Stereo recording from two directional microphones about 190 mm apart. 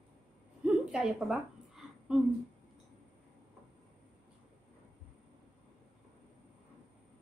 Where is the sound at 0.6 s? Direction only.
Centre (ahead or behind).